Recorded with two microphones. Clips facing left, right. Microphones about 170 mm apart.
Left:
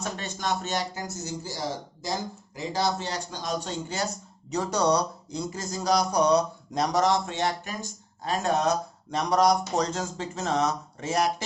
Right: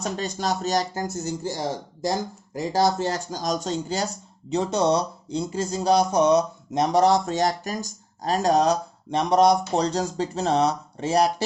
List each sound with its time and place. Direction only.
0.0 s speech: 35° right (ahead or behind)